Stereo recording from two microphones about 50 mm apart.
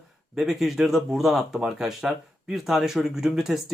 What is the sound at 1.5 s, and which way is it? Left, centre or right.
Speech, centre.